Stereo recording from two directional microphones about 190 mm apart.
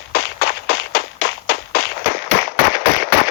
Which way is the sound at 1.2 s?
55° left (ahead or behind).